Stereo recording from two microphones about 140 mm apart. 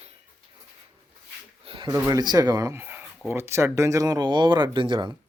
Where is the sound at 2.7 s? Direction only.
15° right (ahead or behind); by 5.1 s 35° right (ahead or behind).